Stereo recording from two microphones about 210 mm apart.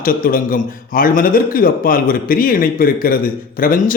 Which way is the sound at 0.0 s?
40° left (ahead or behind).